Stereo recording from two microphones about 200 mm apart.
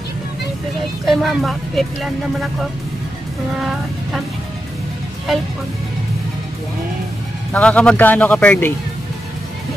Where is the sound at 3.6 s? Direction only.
Centre (ahead or behind).